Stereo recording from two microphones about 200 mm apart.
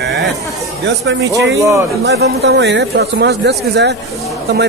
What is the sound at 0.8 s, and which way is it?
Speech, 65° right (ahead or behind).